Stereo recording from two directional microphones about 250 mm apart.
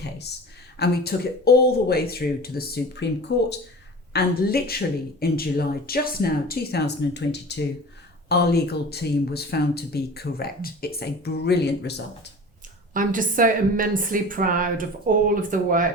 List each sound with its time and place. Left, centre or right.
0.0 s a sound: left
0.8 s speech: left
12.9 s a woman's voice: right